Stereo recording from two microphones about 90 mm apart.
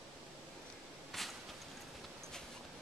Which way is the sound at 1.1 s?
Centre (ahead or behind).